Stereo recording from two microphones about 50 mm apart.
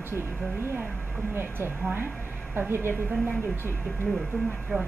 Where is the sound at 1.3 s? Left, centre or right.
Right.